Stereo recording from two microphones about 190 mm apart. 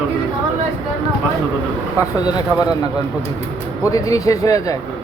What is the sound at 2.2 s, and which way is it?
Speech, 20° left (ahead or behind).